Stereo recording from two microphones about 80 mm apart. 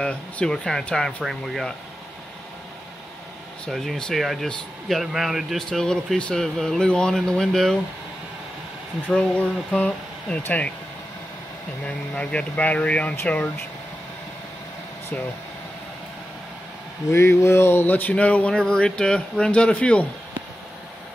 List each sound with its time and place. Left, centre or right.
0.0 s speech: centre
3.6 s speech: centre
9.1 s speech: centre
11.8 s speech: centre
17.1 s speech: left; by 20.1 s centre